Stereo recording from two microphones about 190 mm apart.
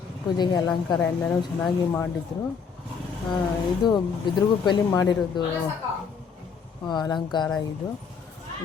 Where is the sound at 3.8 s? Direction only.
20° left (ahead or behind).